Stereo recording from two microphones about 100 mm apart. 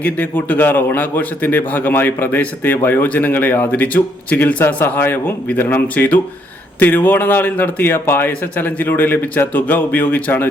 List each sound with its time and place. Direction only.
0.0 s a man's voice: 20° left (ahead or behind)